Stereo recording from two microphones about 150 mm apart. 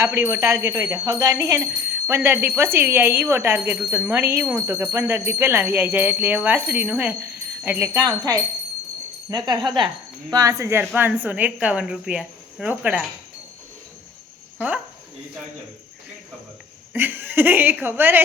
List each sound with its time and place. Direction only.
0.0 s speech: 20° right (ahead or behind)
16.9 s speech: 15° right (ahead or behind)